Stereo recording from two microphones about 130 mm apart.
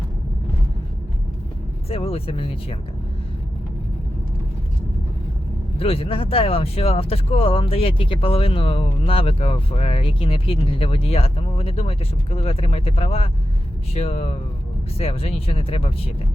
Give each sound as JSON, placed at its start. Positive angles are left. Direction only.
{"t": 1.9, "sound": "speech", "side_deg": 50}
{"t": 5.8, "sound": "speech", "side_deg": 45}